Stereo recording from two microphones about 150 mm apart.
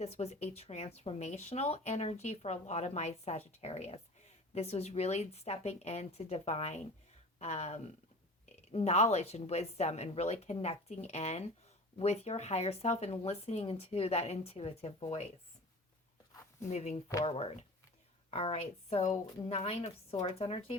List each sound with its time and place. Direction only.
0.0 s speech: 45° left (ahead or behind)
16.3 s a sound: 20° left (ahead or behind)
16.6 s speech: 50° left (ahead or behind)